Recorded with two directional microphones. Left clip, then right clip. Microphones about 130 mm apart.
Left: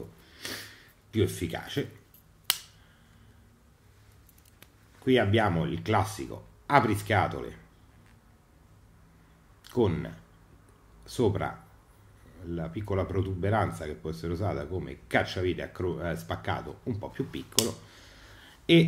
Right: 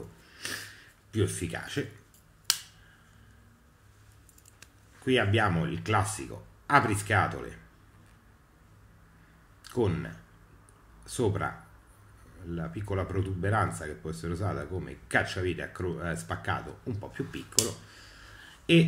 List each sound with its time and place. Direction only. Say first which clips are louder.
0.3 s a sound: right 2 dB; 15° left (ahead or behind)
1.1 s speech: left 2 dB; 20° left (ahead or behind)
2.5 s finger snapping: even; 25° left (ahead or behind)
4.6 s speech: right 1 dB; 15° left (ahead or behind)
9.6 s speech: left 2 dB; 20° left (ahead or behind)
17.9 s a sound: right 2 dB; 25° left (ahead or behind)